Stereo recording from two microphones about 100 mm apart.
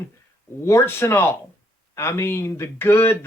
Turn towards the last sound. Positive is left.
turn(degrees=25)  # may be behind; listen again after turning